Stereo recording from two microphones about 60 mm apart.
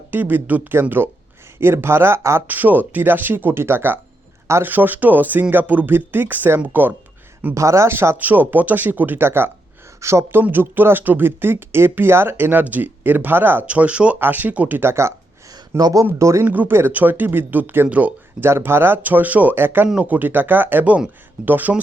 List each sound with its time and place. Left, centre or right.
0.1 s speech: right
2.5 s speech: right
7.5 s speech: right
7.9 s speech: right
10.0 s speech: right
10.4 s speech: right
13.7 s speech: right
14.2 s speech: right
14.8 s speech: right
15.8 s speech: right
16.1 s speech: right
16.5 s speech: right
18.3 s speech: right